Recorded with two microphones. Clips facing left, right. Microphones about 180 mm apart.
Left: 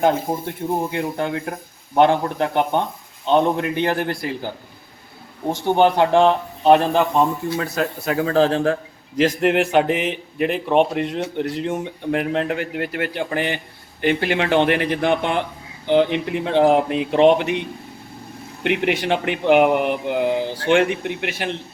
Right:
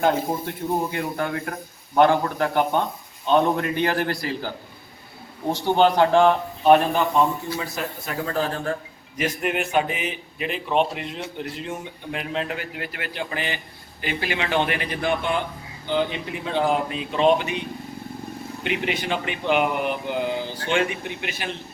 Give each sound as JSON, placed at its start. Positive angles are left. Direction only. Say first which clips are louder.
{"t": 0.3, "sound": "a man's voice", "louder": "left 2 dB", "side_deg": 25}
{"t": 5.6, "sound": "a man's voice", "louder": "left 2 dB", "side_deg": 20}
{"t": 7.5, "sound": "speech", "louder": "left 6 dB", "side_deg": 70}